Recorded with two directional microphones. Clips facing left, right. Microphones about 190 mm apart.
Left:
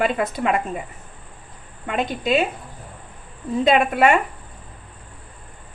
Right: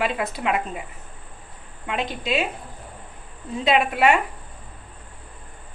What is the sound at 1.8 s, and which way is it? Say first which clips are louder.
Speech: left 4 dB; 45° left (ahead or behind).